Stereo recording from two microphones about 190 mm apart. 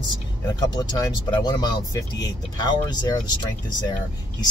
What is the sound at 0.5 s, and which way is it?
Speech, 20° left (ahead or behind).